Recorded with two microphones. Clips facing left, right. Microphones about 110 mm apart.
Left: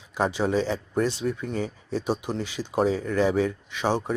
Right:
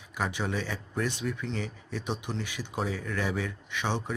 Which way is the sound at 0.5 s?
20° left (ahead or behind).